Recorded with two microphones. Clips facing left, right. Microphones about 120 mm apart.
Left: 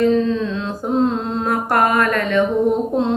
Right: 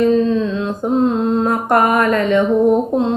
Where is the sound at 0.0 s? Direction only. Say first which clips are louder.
Right 2 dB; 15° right (ahead or behind).